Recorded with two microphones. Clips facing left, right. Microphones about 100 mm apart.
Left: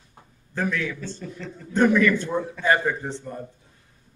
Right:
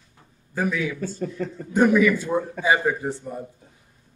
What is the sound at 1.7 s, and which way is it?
Speech, 10° right (ahead or behind).